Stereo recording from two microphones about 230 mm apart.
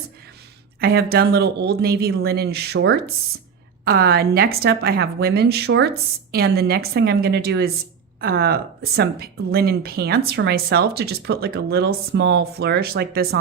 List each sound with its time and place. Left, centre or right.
0.8 s speech: right